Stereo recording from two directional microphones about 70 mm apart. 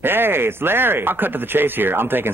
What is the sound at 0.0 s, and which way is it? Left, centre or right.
Speech, right.